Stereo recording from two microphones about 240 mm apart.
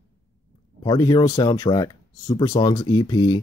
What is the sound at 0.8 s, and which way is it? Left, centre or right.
Speech, centre.